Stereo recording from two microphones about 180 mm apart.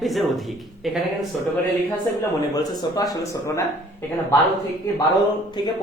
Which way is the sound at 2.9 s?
20° left (ahead or behind).